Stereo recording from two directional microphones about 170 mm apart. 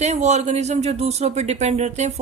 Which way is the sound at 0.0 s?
40° right (ahead or behind).